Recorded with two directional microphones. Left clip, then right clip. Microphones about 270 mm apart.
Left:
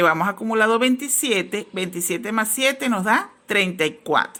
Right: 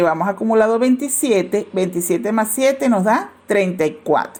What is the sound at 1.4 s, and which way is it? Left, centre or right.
Speech, centre.